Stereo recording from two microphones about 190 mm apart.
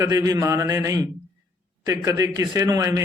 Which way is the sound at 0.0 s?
20° right (ahead or behind).